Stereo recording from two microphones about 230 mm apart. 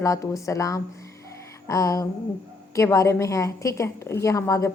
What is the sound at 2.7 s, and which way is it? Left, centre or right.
A woman's voice, centre.